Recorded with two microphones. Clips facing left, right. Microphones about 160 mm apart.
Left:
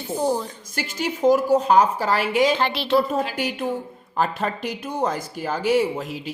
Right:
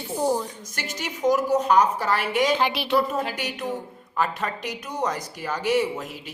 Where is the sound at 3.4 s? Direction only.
30° left (ahead or behind).